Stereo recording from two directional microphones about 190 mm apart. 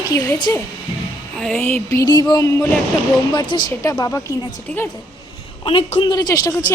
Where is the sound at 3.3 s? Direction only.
25° left (ahead or behind).